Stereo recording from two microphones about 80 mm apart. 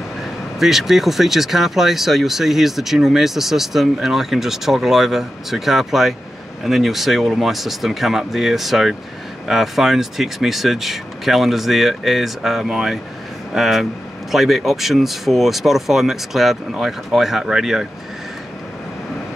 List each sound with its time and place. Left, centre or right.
0.2 s speech: centre